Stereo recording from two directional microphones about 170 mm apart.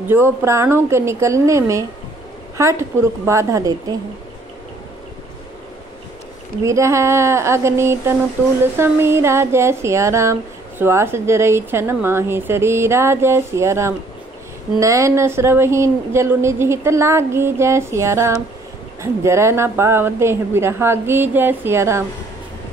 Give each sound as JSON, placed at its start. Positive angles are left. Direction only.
{"t": 0.1, "sound": "speech", "side_deg": -15}
{"t": 6.6, "sound": "speech", "side_deg": -15}